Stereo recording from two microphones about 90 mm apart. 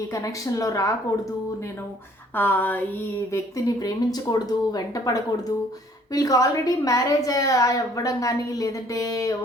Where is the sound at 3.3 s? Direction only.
40° left (ahead or behind).